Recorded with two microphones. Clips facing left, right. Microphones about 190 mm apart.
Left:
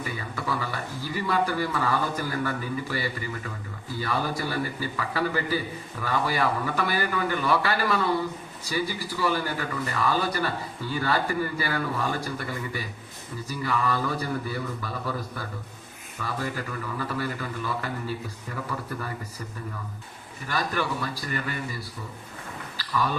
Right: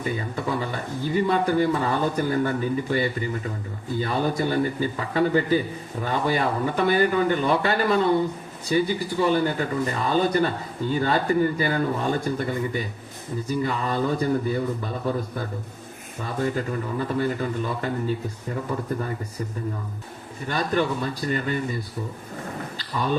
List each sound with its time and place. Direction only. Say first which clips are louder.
0.0 s speech: right 5 dB; 25° right (ahead or behind)
20.5 s a man's voice: right 5 dB; 25° right (ahead or behind)